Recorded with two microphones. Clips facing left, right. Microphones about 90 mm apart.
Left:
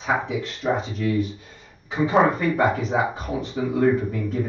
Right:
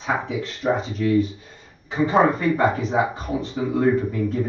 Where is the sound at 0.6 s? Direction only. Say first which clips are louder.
Right 2 dB; 20° right (ahead or behind).